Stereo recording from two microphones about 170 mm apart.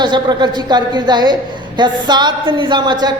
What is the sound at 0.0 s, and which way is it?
A woman's voice, 25° right (ahead or behind).